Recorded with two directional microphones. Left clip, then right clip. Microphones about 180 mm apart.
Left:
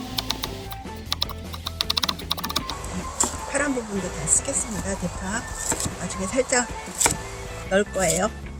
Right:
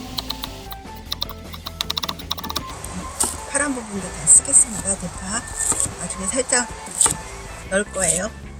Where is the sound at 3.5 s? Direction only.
20° left (ahead or behind).